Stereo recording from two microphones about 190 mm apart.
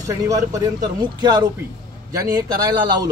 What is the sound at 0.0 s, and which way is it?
A man's voice, 20° right (ahead or behind).